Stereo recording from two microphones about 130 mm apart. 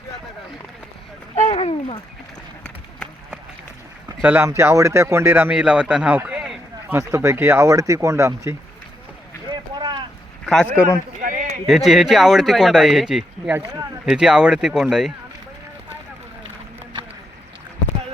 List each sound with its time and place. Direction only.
1.5 s speech: 50° left (ahead or behind)
4.2 s a man's voice: 15° right (ahead or behind)
6.9 s speech: 20° right (ahead or behind)
9.5 s boat: 35° right (ahead or behind)
10.4 s a man's voice: 5° left (ahead or behind)
10.8 s a man's voice: 25° left (ahead or behind)
11.2 s a sound: 90° right
11.6 s speech: centre (ahead or behind)